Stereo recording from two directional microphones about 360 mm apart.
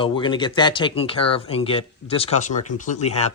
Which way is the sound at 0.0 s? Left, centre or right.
Centre.